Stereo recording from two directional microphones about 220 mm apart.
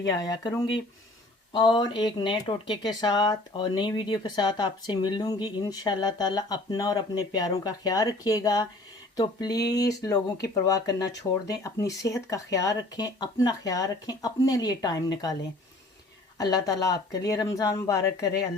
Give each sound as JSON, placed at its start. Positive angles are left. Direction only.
{"t": 0.1, "sound": "speech", "side_deg": 15}
{"t": 16.4, "sound": "speech", "side_deg": 15}